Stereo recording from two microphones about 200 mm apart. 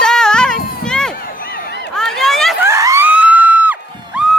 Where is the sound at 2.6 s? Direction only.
15° right (ahead or behind).